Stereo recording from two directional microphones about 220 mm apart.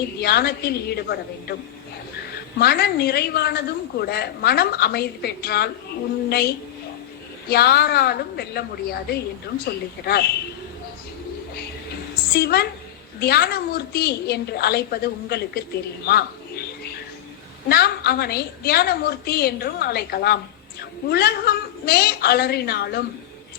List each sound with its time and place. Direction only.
0.2 s a woman's voice: 45° left (ahead or behind)
2.6 s a woman's voice: 45° left (ahead or behind)
7.5 s a woman's voice: 45° left (ahead or behind)
12.3 s a woman's voice: 45° left (ahead or behind)
16.0 s bird: 45° left (ahead or behind)
17.7 s a woman's voice: 45° left (ahead or behind)